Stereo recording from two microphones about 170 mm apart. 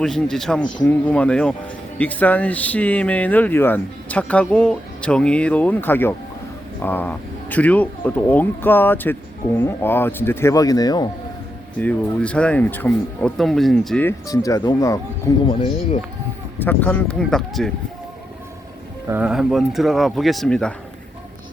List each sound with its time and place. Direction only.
0.0 s speech: 5° left (ahead or behind); by 11.1 s 25° left (ahead or behind)
11.8 s speech: 10° left (ahead or behind)
16.6 s speech: 10° left (ahead or behind)
19.0 s speech: 10° right (ahead or behind)